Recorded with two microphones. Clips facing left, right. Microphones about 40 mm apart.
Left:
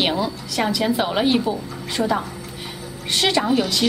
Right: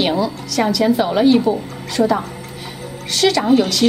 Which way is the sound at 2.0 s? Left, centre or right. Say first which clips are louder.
Right 6 dB; centre.